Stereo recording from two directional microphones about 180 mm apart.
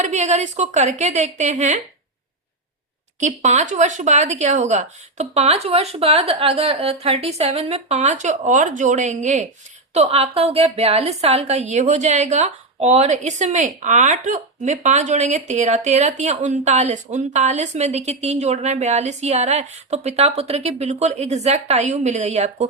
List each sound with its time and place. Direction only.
0.0 s a woman's voice: 40° right (ahead or behind)
3.2 s a woman's voice: 40° right (ahead or behind)